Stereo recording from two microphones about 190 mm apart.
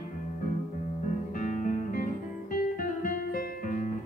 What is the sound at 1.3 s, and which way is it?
Music, 40° left (ahead or behind).